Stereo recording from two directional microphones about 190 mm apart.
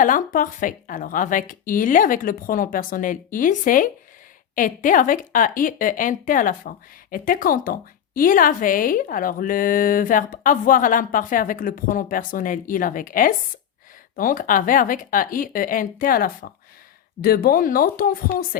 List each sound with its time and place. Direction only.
0.0 s speech: 45° left (ahead or behind)